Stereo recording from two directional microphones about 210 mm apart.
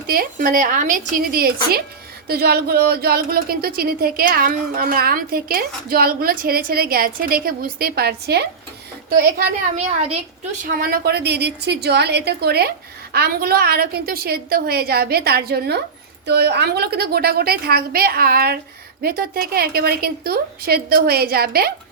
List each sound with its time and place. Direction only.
0.1 s speech: 45° right (ahead or behind)
10.8 s speech: 45° right (ahead or behind)